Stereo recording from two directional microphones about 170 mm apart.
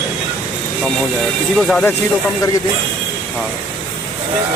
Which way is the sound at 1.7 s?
10° left (ahead or behind).